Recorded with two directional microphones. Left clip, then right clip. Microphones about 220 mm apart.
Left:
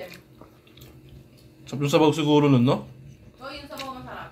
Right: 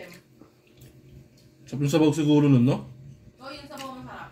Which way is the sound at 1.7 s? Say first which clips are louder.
Left 2 dB; 15° right (ahead or behind).